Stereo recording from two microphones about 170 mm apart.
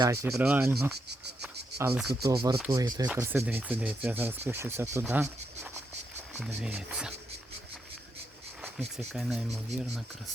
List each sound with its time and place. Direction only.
0.0 s speech: 15° right (ahead or behind)
3.1 s speech: 10° right (ahead or behind)
6.6 s speech: 5° right (ahead or behind)
9.1 s speech: centre (ahead or behind)